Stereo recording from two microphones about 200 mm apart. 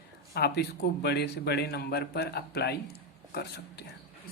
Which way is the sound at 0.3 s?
55° left (ahead or behind).